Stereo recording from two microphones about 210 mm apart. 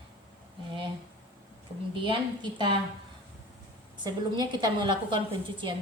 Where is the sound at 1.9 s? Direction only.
25° right (ahead or behind).